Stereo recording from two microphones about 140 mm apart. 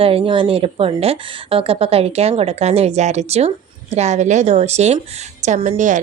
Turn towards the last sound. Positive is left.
turn(degrees=-65)  # may be behind; listen again after turning